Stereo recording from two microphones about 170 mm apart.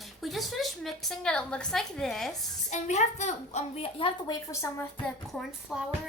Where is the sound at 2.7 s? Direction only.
45° left (ahead or behind).